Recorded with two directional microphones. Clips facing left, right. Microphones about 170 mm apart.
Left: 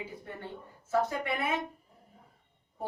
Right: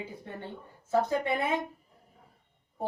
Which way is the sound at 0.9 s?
20° right (ahead or behind).